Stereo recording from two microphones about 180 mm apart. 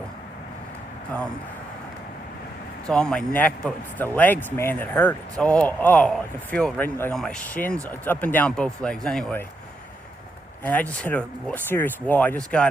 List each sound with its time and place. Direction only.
2.8 s a man's voice: 5° left (ahead or behind)
10.6 s a man's voice: 10° left (ahead or behind)